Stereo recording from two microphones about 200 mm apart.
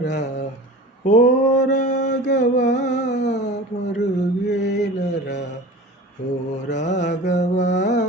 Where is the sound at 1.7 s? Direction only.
40° left (ahead or behind).